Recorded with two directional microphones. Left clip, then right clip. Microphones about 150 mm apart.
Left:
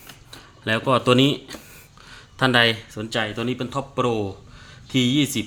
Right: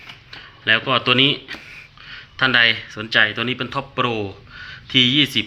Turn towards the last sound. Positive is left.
turn(degrees=15)  # may be behind; listen again after turning